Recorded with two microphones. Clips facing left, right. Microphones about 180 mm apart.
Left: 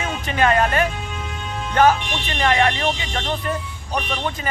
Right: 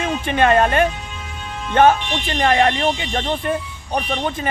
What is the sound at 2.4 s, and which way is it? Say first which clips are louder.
Speech: right 2 dB; 35° right (ahead or behind).